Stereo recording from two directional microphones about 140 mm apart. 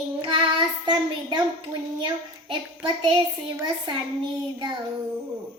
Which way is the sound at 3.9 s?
35° right (ahead or behind).